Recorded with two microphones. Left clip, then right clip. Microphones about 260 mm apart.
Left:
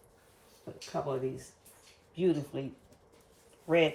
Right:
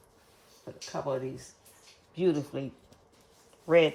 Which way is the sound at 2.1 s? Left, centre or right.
Right.